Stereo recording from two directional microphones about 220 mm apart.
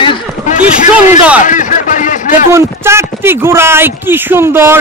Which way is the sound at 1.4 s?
35° left (ahead or behind).